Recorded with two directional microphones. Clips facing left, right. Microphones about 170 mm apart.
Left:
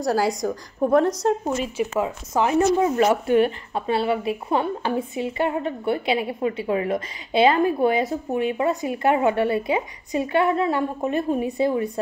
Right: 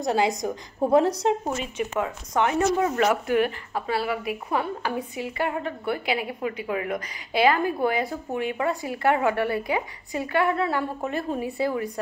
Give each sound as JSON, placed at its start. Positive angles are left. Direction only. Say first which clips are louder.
{"t": 0.1, "sound": "a woman's voice", "louder": "left 1 dB", "side_deg": 0}
{"t": 0.8, "sound": "a woman's voice", "louder": "left 1 dB", "side_deg": -30}
{"t": 1.8, "sound": "a woman's voice", "louder": "left 2 dB", "side_deg": 10}
{"t": 2.3, "sound": "a woman's voice", "louder": "left 3 dB", "side_deg": 25}